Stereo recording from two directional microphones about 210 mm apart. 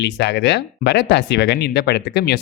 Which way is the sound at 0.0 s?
55° left (ahead or behind).